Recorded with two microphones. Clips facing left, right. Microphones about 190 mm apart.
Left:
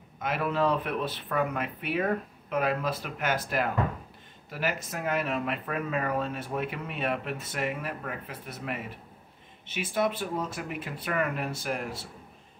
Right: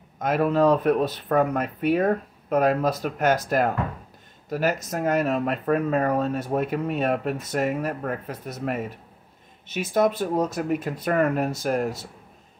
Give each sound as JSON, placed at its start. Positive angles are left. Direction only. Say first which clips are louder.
{"t": 0.2, "sound": "speech", "louder": "right 7 dB", "side_deg": -40}